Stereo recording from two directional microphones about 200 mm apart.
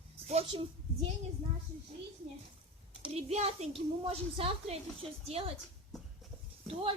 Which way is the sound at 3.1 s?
30° right (ahead or behind).